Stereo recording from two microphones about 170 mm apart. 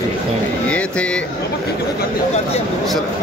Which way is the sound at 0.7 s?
5° left (ahead or behind).